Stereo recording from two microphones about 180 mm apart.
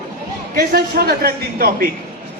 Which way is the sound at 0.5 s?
55° right (ahead or behind).